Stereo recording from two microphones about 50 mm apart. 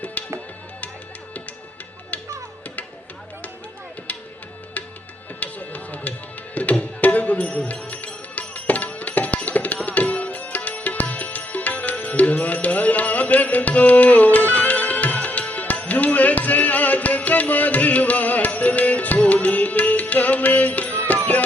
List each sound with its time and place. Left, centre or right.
0.0 s music: left
5.4 s music: left
7.3 s music: left